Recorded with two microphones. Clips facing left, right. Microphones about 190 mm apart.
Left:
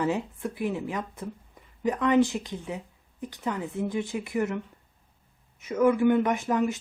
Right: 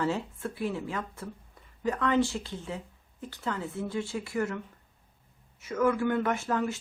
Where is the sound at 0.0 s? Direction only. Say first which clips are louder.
Left 3 dB; 15° left (ahead or behind).